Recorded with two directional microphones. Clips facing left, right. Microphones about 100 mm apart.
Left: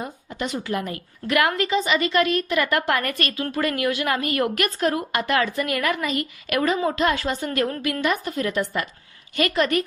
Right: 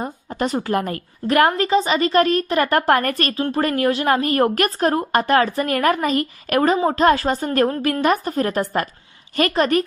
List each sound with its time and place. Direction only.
0.0 s a woman's voice: 40° right (ahead or behind)